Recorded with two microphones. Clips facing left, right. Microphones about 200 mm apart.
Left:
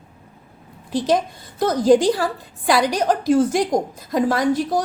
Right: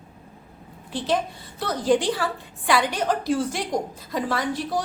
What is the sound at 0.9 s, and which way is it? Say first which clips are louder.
A woman's voice: left 5 dB; 40° left (ahead or behind).